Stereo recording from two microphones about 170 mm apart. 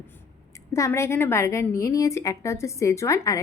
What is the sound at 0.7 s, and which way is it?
A woman's voice, 15° left (ahead or behind).